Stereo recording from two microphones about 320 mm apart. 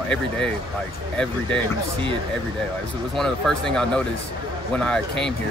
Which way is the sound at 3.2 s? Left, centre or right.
Centre.